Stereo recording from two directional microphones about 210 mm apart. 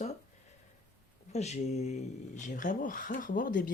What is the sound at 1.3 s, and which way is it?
Speech, 30° left (ahead or behind).